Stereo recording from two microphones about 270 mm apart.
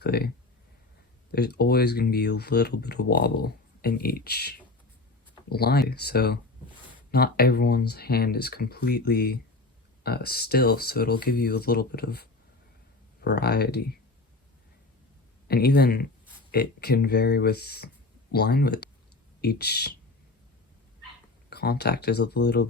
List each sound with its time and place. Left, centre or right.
0.0 s speech: left
1.3 s speech: left
15.4 s speech: left
21.5 s speech: left